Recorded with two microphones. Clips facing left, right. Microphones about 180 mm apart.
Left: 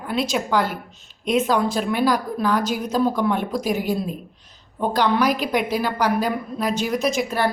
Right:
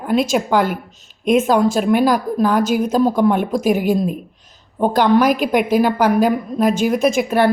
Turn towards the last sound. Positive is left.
turn(degrees=-60)  # may be behind; listen again after turning